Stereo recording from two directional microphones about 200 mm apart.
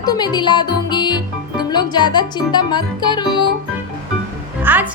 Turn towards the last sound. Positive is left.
turn(degrees=-10)  # may be behind; listen again after turning